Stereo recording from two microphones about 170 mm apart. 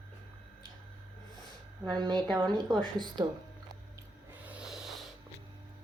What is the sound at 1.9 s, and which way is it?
Speech, 25° right (ahead or behind).